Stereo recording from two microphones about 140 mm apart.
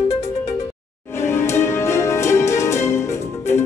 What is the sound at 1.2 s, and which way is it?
Music, 20° left (ahead or behind).